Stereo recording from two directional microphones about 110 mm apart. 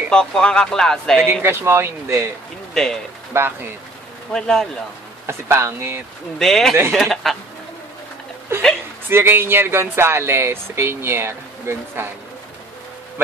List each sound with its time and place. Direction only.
0.1 s speech: 5° left (ahead or behind)
1.4 s speech: 20° right (ahead or behind)
2.7 s speech: 5° left (ahead or behind)
3.3 s speech: 20° right (ahead or behind)
4.3 s speech: 5° left (ahead or behind)
5.2 s speech: 25° right (ahead or behind)
6.3 s speech: 5° left (ahead or behind)
8.5 s speech: 20° right (ahead or behind)